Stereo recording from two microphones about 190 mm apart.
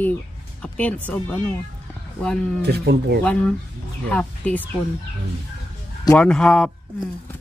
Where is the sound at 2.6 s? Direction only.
60° right (ahead or behind).